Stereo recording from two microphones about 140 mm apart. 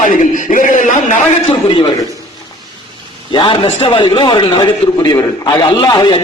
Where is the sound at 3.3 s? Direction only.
35° left (ahead or behind).